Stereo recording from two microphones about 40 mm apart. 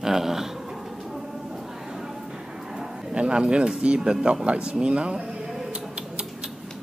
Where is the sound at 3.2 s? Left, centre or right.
Right.